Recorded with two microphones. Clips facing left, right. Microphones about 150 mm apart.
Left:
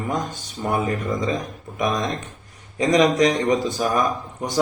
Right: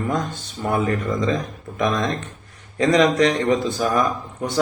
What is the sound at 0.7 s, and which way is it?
Speech, 15° left (ahead or behind).